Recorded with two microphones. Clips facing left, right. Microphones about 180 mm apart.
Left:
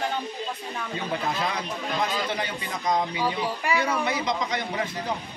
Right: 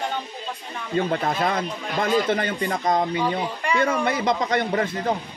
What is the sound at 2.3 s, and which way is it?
Speech, 50° right (ahead or behind).